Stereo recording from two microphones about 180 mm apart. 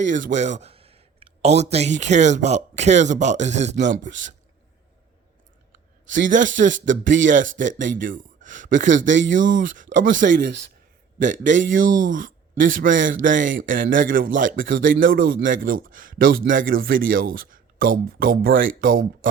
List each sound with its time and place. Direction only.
0.0 s a man's voice: 45° right (ahead or behind)
6.3 s a man's voice: 45° right (ahead or behind)